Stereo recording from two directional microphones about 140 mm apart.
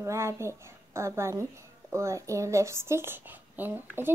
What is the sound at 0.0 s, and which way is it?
A woman's voice, 20° right (ahead or behind).